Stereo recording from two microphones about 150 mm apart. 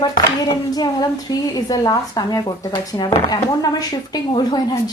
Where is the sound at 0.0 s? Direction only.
25° left (ahead or behind).